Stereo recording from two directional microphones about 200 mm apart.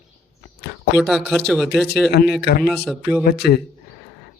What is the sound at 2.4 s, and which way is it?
Speech, 55° left (ahead or behind).